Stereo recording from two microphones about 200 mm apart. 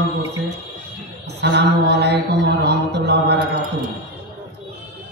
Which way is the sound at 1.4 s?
55° right (ahead or behind).